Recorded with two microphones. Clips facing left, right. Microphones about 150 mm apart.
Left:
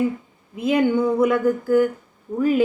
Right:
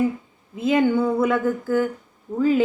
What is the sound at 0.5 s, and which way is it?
Speech, 15° left (ahead or behind).